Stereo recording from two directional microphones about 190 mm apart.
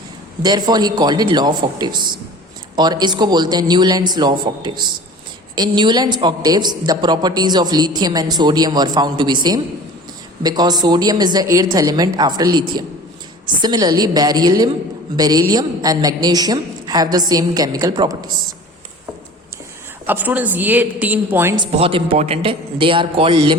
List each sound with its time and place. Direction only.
0.4 s a man's voice: 20° right (ahead or behind)
20.1 s a woman's voice: 10° right (ahead or behind)
21.6 s a man's voice: 30° right (ahead or behind)